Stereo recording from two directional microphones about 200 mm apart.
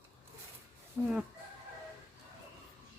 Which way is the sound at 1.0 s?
15° right (ahead or behind).